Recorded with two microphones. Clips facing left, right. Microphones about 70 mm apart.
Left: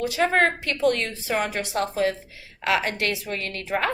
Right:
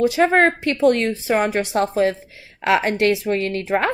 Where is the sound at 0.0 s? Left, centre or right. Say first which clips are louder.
Right 6 dB; right.